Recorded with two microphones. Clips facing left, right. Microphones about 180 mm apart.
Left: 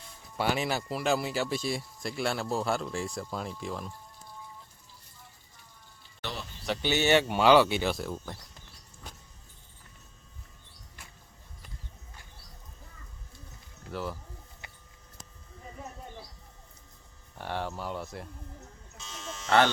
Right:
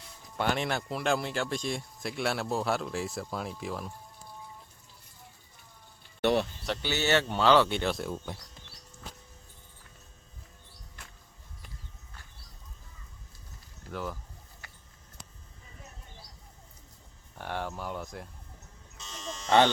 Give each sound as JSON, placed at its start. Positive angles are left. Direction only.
{"t": 0.3, "sound": "speech", "side_deg": 5}
{"t": 6.8, "sound": "speech", "side_deg": 15}
{"t": 13.9, "sound": "speech", "side_deg": 5}
{"t": 17.4, "sound": "speech", "side_deg": -5}
{"t": 18.9, "sound": "electric shaver", "side_deg": 5}
{"t": 19.5, "sound": "speech", "side_deg": -15}